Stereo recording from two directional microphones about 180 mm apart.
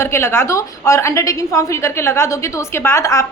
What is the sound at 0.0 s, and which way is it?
A woman's voice, 15° left (ahead or behind).